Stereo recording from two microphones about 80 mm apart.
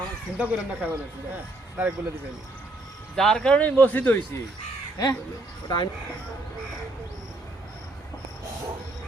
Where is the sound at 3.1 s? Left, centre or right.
Centre; by 4.1 s left.